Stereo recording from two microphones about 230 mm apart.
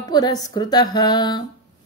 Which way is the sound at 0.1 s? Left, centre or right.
Centre.